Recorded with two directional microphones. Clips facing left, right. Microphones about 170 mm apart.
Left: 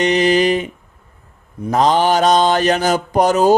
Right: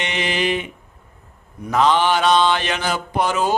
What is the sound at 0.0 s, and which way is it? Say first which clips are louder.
Mantra: left 9 dB; 40° left (ahead or behind).